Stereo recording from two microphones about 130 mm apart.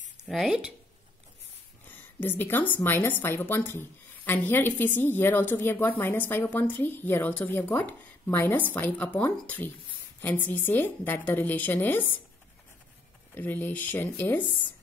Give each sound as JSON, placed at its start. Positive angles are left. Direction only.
{"t": 0.3, "sound": "speech", "side_deg": -5}
{"t": 2.1, "sound": "a woman's voice", "side_deg": 15}
{"t": 13.3, "sound": "a woman's voice", "side_deg": 15}